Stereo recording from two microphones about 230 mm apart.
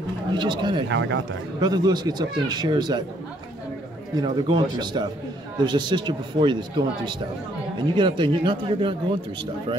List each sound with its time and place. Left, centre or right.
0.3 s a man's voice: centre
0.8 s speech: right
1.6 s speech: centre
4.1 s a man's voice: centre